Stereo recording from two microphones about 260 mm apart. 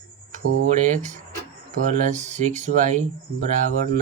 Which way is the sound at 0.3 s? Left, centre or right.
Right.